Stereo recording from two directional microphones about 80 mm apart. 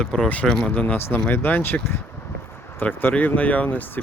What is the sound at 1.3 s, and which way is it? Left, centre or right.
Speech, left.